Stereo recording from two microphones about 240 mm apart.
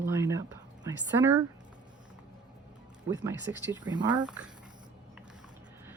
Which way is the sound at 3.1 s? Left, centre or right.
Centre.